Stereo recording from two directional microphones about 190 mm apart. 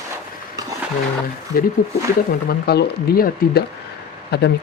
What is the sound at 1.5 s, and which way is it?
Speech, 50° left (ahead or behind).